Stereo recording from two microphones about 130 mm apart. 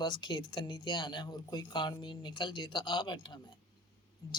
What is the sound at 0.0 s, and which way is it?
Speech, 35° left (ahead or behind).